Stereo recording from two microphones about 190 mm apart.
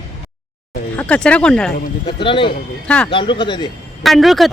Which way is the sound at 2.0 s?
25° left (ahead or behind).